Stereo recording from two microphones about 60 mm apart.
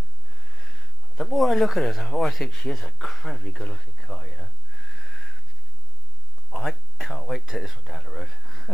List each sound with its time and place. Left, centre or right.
0.6 s speech: centre
4.8 s a sound: centre
6.6 s speech: centre